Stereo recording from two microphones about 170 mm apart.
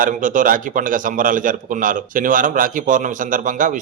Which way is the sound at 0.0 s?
50° right (ahead or behind).